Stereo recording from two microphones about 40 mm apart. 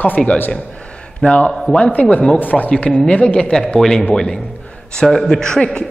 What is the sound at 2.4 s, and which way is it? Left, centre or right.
Speech, left.